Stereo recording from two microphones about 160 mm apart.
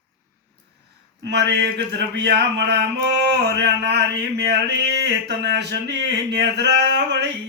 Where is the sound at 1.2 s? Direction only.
90° right.